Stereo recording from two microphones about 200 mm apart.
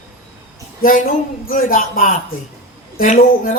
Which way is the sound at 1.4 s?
45° left (ahead or behind).